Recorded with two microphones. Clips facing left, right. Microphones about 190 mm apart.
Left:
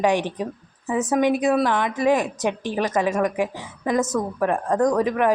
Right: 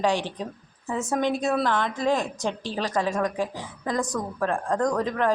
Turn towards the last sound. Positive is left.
turn(degrees=15)  # may be behind; listen again after turning